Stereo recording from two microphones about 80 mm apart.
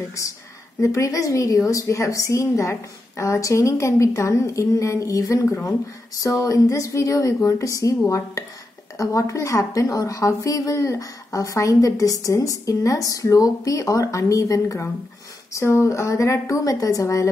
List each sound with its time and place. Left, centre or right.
0.7 s a woman's voice: left
8.9 s a woman's voice: left